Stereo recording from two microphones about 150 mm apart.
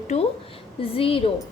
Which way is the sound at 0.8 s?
40° left (ahead or behind).